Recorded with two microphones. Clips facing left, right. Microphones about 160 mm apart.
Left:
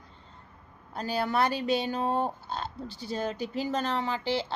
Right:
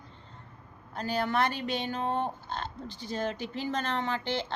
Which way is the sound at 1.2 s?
10° left (ahead or behind).